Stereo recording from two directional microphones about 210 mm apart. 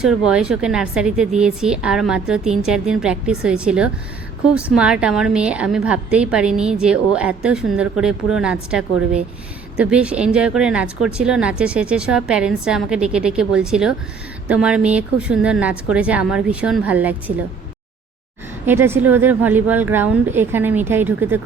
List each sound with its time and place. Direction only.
0.3 s a woman's voice: 5° right (ahead or behind)
18.6 s speech: 10° right (ahead or behind)